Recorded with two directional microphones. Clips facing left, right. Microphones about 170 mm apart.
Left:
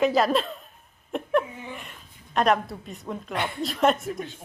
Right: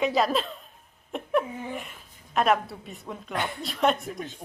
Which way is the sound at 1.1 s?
Centre (ahead or behind).